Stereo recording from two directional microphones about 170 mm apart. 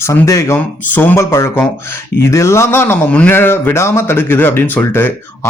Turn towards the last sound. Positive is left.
turn(degrees=10)  # may be behind; listen again after turning